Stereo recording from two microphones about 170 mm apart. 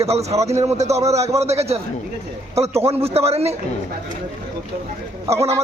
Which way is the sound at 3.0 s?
35° right (ahead or behind).